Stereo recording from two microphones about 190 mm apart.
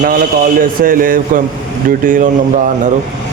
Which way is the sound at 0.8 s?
45° right (ahead or behind).